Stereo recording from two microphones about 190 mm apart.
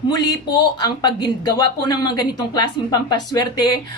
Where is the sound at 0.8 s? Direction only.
25° left (ahead or behind).